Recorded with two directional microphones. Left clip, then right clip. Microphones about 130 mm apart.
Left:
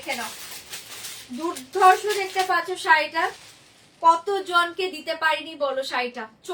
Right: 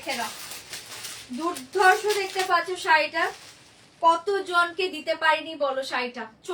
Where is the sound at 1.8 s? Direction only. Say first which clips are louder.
Left 3 dB; 15° left (ahead or behind).